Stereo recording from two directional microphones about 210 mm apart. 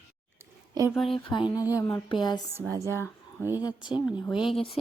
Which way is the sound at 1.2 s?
20° left (ahead or behind).